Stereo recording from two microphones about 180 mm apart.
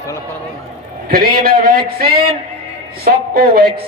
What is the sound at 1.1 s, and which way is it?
A man's voice, 55° right (ahead or behind).